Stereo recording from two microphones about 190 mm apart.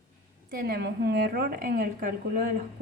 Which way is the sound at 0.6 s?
55° right (ahead or behind).